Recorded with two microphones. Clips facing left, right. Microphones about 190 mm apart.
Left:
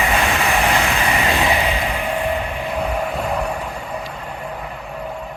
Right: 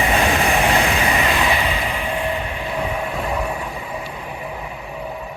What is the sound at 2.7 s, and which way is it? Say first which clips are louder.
Vehicle: left 2 dB; centre (ahead or behind).